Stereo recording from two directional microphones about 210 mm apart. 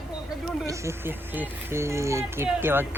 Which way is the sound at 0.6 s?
10° right (ahead or behind).